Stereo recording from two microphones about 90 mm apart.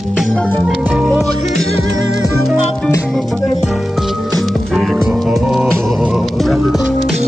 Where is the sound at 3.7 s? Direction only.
Centre (ahead or behind).